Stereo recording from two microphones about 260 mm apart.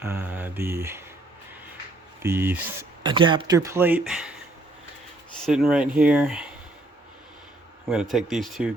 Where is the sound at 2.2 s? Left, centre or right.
Centre.